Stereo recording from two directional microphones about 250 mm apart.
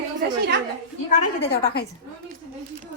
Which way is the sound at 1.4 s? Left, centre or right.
Left.